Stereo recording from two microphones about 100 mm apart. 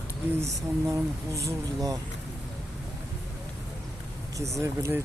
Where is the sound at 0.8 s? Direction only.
30° right (ahead or behind).